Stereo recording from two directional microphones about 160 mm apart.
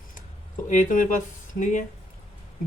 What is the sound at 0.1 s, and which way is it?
Speech, 55° left (ahead or behind).